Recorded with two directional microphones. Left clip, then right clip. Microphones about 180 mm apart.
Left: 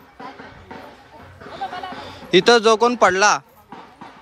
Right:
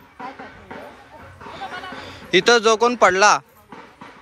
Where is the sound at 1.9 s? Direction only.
25° left (ahead or behind).